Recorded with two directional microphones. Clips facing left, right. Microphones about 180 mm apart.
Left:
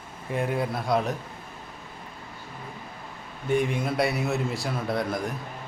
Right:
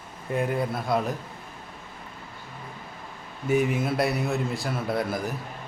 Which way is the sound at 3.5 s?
5° right (ahead or behind).